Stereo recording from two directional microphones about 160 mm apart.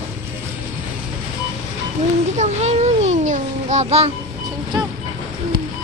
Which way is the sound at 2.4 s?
45° right (ahead or behind).